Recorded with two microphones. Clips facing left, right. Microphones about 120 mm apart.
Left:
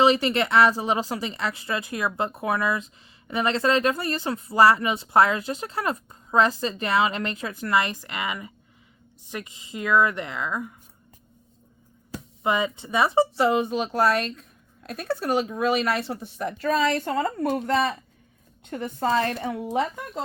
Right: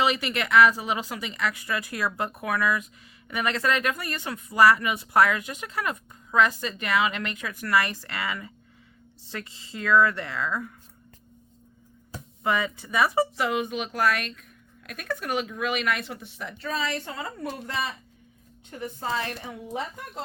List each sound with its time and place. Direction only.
0.0 s speech: 30° left (ahead or behind)
12.4 s a woman's voice: 20° left (ahead or behind); by 19.9 s 90° left